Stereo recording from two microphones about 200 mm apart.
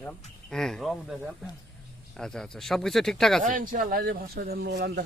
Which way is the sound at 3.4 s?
40° right (ahead or behind).